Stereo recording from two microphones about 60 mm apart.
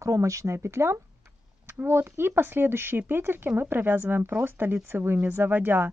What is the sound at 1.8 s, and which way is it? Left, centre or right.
Speech, right.